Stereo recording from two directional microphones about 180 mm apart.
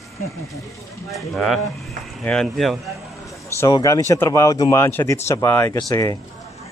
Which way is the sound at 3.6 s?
15° left (ahead or behind).